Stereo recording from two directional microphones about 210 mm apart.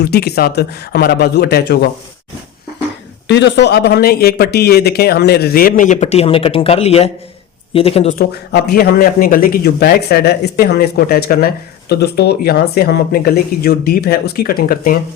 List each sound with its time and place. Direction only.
0.0 s a man's voice: 50° left (ahead or behind)
3.2 s a man's voice: 55° left (ahead or behind); by 8.2 s 30° left (ahead or behind)
8.2 s a man's voice: 45° left (ahead or behind)